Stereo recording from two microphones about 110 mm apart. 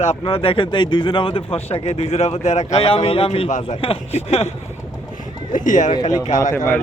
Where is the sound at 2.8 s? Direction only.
55° left (ahead or behind); by 4.5 s 70° left (ahead or behind).